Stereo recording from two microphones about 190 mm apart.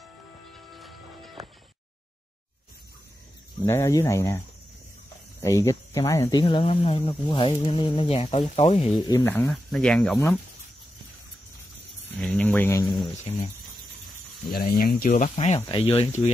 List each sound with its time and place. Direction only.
0.5 s music: centre (ahead or behind)
3.6 s speech: 15° left (ahead or behind)
5.4 s speech: 15° left (ahead or behind)
6.4 s speech: 30° left (ahead or behind)
9.0 s speech: 15° left (ahead or behind)
10.1 s speech: 15° left (ahead or behind)
12.2 s a sound: 5° left (ahead or behind)
13.3 s a sound: 30° left (ahead or behind)
14.5 s speech: 50° left (ahead or behind)
15.0 s speech: 40° left (ahead or behind)